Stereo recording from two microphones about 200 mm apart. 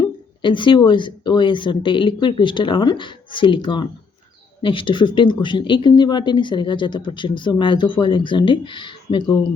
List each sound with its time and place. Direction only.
0.0 s speech: 25° left (ahead or behind)